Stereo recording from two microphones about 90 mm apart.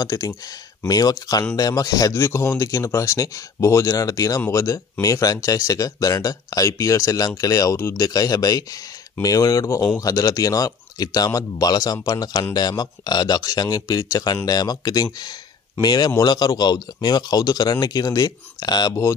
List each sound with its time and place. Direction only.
0.0 s speech: 40° left (ahead or behind)